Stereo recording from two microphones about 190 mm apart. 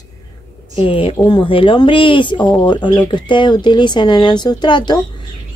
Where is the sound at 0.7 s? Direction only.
30° left (ahead or behind).